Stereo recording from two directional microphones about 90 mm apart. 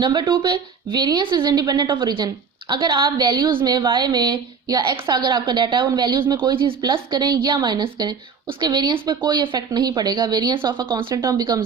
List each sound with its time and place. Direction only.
0.0 s a woman's voice: 55° right (ahead or behind)
6.9 s a woman's voice: 50° right (ahead or behind)
10.9 s speech: 35° right (ahead or behind)